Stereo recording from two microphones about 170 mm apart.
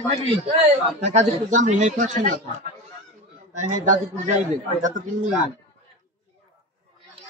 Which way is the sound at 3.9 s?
45° right (ahead or behind).